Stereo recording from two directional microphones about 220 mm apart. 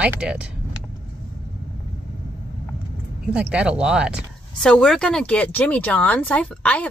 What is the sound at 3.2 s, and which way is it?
Speech, 5° right (ahead or behind).